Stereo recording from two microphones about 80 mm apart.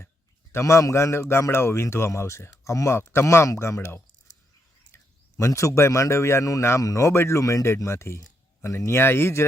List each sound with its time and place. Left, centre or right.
0.5 s speech: left
5.4 s speech: left